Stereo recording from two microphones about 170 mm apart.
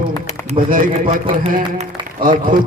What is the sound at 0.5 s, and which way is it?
A man's voice, 55° right (ahead or behind).